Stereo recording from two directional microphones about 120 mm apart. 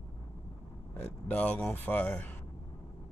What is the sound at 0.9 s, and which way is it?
Speech, 15° left (ahead or behind).